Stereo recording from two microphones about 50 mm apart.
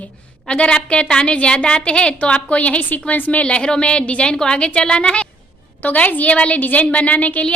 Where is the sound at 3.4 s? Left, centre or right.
Centre.